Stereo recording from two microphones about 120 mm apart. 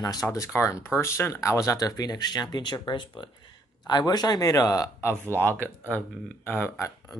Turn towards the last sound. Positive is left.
turn(degrees=15)  # may be behind; listen again after turning